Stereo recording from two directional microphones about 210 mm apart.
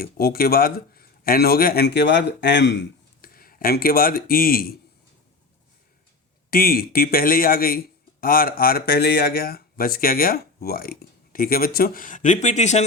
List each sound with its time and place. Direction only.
0.0 s a man's voice: 45° left (ahead or behind)
6.5 s speech: 45° left (ahead or behind)